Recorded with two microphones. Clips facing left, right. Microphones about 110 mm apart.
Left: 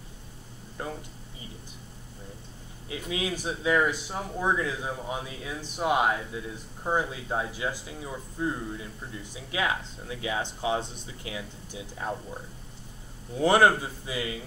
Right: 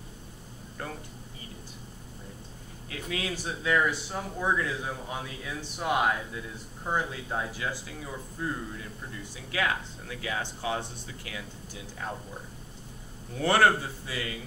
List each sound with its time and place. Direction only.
0.8 s a sound: 20° left (ahead or behind)
2.9 s speech: 20° left (ahead or behind)
13.3 s speech: 20° left (ahead or behind)